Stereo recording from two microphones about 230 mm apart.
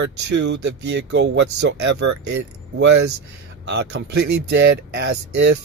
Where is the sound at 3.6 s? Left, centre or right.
Right.